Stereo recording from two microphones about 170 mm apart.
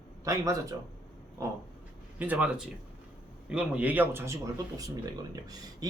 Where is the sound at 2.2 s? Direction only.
10° right (ahead or behind).